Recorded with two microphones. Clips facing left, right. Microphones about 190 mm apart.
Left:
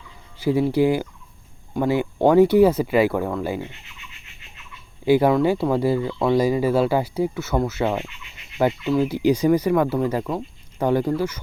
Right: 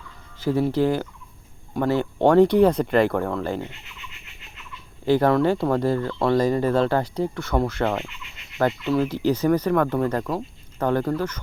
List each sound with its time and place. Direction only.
0.3 s a sound: 10° left (ahead or behind)
0.7 s speech: 10° left (ahead or behind)
5.0 s speech: 10° left (ahead or behind)